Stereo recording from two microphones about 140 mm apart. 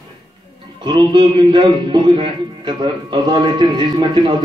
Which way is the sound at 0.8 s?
30° right (ahead or behind).